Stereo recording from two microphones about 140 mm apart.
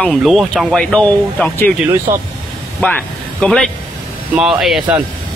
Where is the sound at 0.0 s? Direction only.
Centre (ahead or behind).